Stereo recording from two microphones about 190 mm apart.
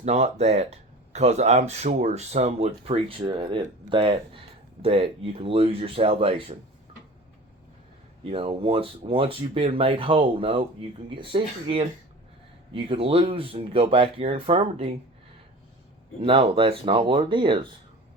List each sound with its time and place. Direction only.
0.0 s speech: 35° right (ahead or behind)
8.3 s speech: 30° right (ahead or behind)
16.2 s speech: 30° right (ahead or behind)